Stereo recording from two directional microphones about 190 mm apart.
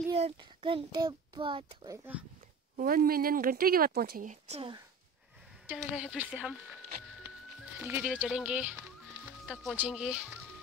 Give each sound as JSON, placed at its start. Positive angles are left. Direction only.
{"t": 0.1, "sound": "a child's voice", "side_deg": -30}
{"t": 1.9, "sound": "speech", "side_deg": -10}
{"t": 2.7, "sound": "speech", "side_deg": -50}
{"t": 5.7, "sound": "speech", "side_deg": -5}
{"t": 7.8, "sound": "speech", "side_deg": -10}